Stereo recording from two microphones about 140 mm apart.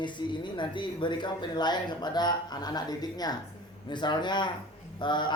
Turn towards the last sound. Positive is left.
turn(degrees=35)  # may be behind; listen again after turning